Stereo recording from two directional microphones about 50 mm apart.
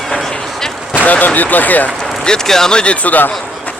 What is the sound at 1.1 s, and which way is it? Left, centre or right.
Speech, left.